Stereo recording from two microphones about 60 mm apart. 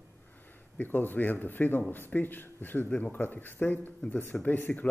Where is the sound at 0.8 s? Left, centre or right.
Left.